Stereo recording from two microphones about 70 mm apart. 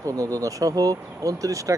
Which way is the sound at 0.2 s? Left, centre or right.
Right.